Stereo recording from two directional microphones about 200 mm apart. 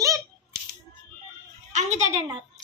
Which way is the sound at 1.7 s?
35° right (ahead or behind).